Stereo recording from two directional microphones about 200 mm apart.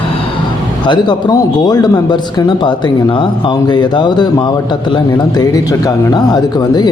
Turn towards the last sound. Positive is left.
turn(degrees=20)  # may be behind; listen again after turning